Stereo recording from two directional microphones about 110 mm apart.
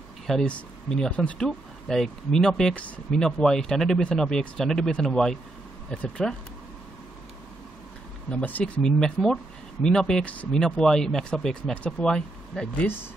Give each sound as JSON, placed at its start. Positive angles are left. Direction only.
{"t": 0.3, "sound": "speech", "side_deg": 10}
{"t": 8.3, "sound": "speech", "side_deg": 15}
{"t": 12.8, "sound": "speech", "side_deg": 20}